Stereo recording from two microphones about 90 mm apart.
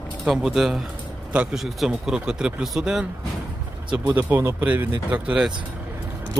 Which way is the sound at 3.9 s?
20° right (ahead or behind).